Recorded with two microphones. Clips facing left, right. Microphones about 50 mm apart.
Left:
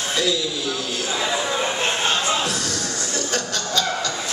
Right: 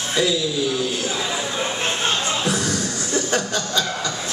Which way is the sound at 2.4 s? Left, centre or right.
Centre.